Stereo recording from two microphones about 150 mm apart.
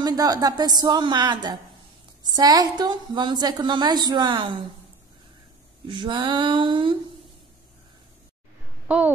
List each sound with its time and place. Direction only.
0.0 s a woman's voice: 25° right (ahead or behind)
5.9 s a sound: 30° right (ahead or behind)
8.8 s speech: 10° right (ahead or behind)